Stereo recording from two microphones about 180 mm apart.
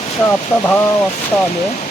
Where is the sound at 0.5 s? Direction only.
20° left (ahead or behind).